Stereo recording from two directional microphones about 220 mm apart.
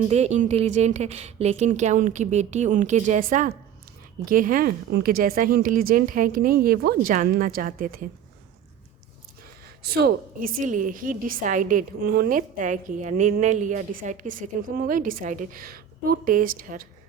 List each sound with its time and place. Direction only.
0.1 s a woman's voice: 30° right (ahead or behind)
9.8 s a woman's voice: 45° right (ahead or behind)